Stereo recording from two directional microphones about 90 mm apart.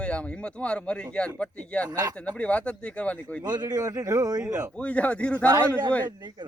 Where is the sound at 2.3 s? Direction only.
15° left (ahead or behind).